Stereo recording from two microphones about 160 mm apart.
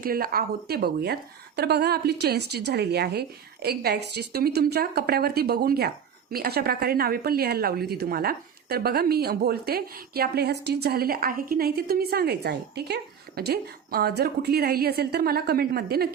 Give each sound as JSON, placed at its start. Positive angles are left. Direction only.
{"t": 0.0, "sound": "speech", "side_deg": -65}